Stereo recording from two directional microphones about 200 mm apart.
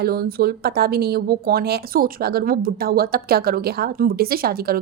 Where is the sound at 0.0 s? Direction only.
50° right (ahead or behind).